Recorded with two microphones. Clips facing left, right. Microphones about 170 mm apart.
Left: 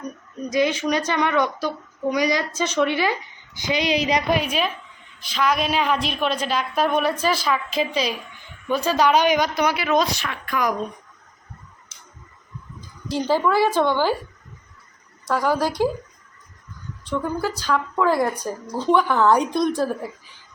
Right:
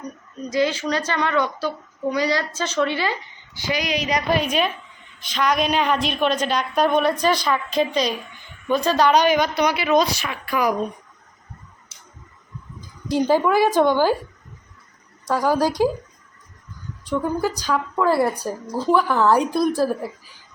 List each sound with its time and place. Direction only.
0.5 s speech: 15° left (ahead or behind)
5.2 s speech: centre (ahead or behind)
13.1 s a woman's voice: 15° right (ahead or behind)
15.3 s a woman's voice: 15° right (ahead or behind)
17.1 s speech: 15° right (ahead or behind)